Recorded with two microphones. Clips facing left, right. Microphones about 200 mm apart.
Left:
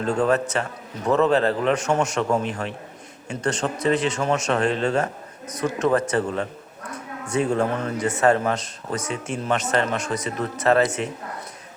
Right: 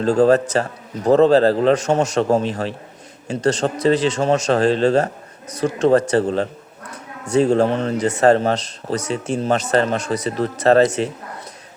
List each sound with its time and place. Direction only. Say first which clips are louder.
0.0 s speech: right 7 dB; 30° right (ahead or behind)